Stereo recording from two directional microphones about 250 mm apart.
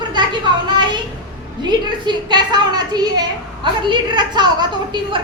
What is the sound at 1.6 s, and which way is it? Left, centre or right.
A woman's voice, centre.